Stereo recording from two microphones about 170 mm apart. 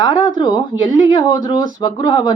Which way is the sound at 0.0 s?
25° left (ahead or behind).